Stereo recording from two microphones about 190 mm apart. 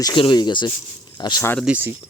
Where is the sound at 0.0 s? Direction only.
20° left (ahead or behind).